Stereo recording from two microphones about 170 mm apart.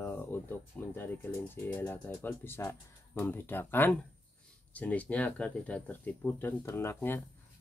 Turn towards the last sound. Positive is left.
turn(degrees=15)  # may be behind; listen again after turning